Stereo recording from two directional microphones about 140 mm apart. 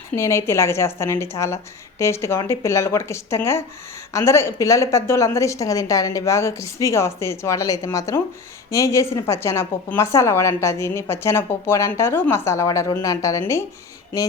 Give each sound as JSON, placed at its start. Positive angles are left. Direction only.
{"t": 0.1, "sound": "a woman's voice", "side_deg": 20}